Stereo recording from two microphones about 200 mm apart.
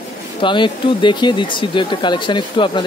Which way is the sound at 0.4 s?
25° left (ahead or behind).